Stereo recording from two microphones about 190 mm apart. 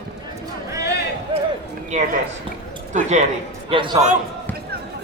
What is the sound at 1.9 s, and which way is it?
Speech, 35° right (ahead or behind).